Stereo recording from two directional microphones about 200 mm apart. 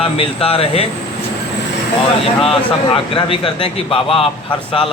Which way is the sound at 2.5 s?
25° left (ahead or behind).